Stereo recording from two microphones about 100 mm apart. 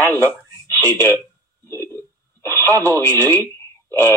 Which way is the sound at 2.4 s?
25° left (ahead or behind).